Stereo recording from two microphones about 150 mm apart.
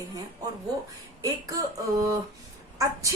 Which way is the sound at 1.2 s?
25° right (ahead or behind).